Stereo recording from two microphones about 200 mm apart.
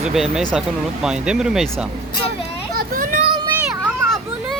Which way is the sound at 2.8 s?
45° right (ahead or behind).